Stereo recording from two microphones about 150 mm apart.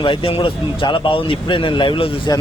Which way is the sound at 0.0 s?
35° left (ahead or behind).